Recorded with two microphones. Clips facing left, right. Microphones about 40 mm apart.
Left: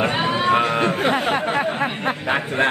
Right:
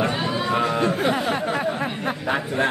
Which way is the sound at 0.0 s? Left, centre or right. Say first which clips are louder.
Left 4 dB; left.